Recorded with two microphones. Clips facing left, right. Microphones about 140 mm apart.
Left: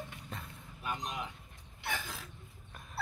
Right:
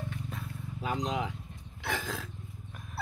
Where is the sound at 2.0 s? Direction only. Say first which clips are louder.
Right 7 dB; 90° right.